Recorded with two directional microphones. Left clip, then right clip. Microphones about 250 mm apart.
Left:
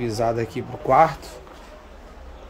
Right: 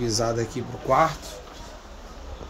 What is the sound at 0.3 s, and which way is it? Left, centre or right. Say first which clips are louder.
Speech: left 2 dB; left.